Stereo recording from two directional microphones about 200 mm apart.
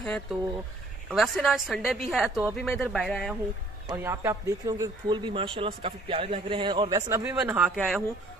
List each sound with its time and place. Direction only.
0.0 s a woman's voice: 5° left (ahead or behind)
3.8 s a woman's voice: 15° right (ahead or behind)